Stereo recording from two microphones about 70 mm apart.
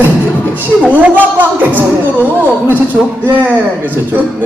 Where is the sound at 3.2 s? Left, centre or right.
Right.